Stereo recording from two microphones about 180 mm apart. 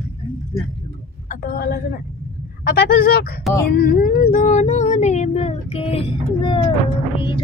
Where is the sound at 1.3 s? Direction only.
55° left (ahead or behind); by 6.6 s 30° left (ahead or behind).